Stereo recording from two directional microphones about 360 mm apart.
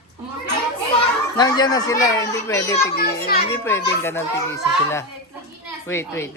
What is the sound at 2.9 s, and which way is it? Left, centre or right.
Speech, left.